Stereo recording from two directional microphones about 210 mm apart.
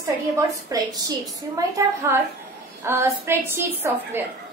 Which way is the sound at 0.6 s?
20° right (ahead or behind).